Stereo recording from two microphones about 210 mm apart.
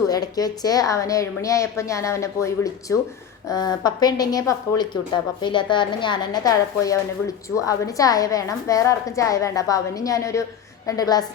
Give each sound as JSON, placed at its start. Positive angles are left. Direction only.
{"t": 0.1, "sound": "a woman's voice", "side_deg": 20}